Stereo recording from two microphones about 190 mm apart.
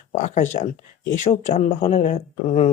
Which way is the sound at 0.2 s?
40° left (ahead or behind).